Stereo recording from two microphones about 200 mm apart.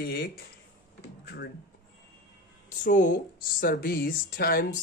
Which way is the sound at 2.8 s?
40° left (ahead or behind).